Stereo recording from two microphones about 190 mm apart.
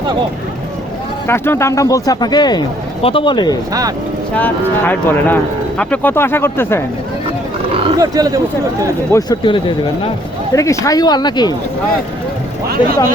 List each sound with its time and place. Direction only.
1.3 s speech: 15° left (ahead or behind)
3.7 s speech: 20° right (ahead or behind)
4.4 s speech: 10° left (ahead or behind)
7.7 s speech: 25° right (ahead or behind)
9.1 s speech: 20° left (ahead or behind)